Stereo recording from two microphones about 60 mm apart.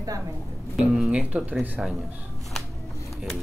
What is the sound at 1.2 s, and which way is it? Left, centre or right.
Speech, right.